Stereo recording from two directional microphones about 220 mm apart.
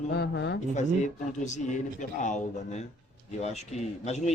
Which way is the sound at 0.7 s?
35° left (ahead or behind).